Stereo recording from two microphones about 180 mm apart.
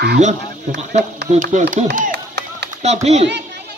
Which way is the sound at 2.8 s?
40° right (ahead or behind).